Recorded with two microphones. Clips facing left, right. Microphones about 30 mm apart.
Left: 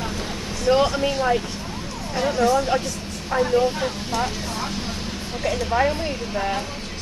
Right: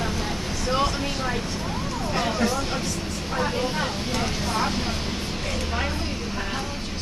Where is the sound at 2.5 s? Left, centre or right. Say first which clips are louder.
Left 6 dB; left.